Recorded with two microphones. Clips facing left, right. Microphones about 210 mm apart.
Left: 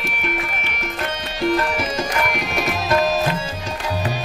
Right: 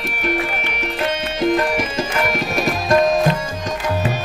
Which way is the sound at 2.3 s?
Centre (ahead or behind).